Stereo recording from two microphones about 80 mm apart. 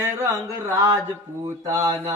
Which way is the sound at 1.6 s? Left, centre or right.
Right.